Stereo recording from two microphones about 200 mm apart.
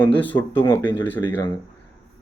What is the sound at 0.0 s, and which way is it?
Speech, 10° left (ahead or behind).